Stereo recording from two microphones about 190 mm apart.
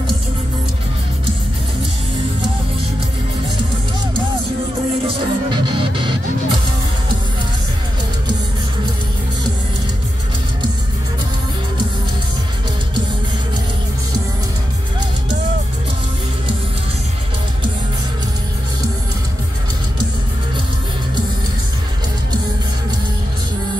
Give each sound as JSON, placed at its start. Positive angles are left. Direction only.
{"t": 5.0, "sound": "music", "side_deg": -25}